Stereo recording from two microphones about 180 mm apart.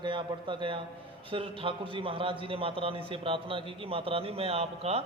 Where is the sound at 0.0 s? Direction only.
25° right (ahead or behind).